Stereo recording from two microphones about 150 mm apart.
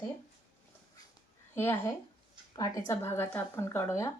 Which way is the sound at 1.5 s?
15° left (ahead or behind).